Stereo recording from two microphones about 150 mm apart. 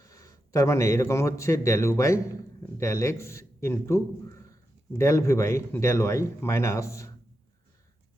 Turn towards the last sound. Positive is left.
turn(degrees=20)  # may be behind; listen again after turning